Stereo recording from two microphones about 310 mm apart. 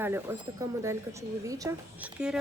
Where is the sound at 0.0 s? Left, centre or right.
Centre.